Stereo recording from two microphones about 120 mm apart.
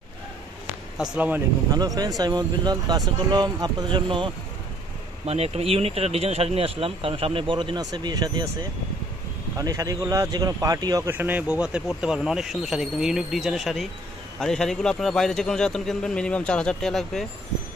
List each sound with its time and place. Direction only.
0.9 s speech: 5° right (ahead or behind)
1.7 s speech: 35° right (ahead or behind)
5.2 s speech: 60° right (ahead or behind); by 8.5 s 35° right (ahead or behind)
9.6 s speech: 30° right (ahead or behind)
11.1 s speech: 15° right (ahead or behind); by 17.3 s 5° left (ahead or behind)